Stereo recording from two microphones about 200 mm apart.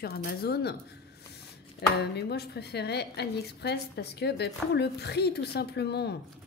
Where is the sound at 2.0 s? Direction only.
55° left (ahead or behind).